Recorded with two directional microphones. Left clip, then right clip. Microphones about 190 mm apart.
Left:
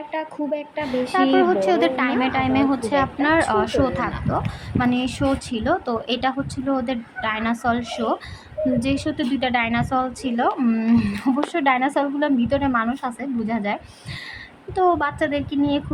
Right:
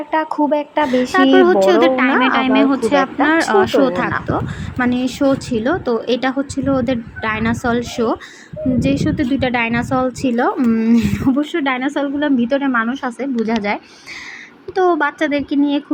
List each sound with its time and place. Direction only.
0.1 s a woman's voice: 25° right (ahead or behind); by 12.3 s 5° right (ahead or behind)
12.5 s a woman's voice: 15° right (ahead or behind)
14.8 s a woman's voice: 15° right (ahead or behind)